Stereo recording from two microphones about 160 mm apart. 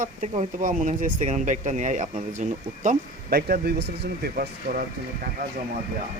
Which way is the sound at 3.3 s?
70° right (ahead or behind).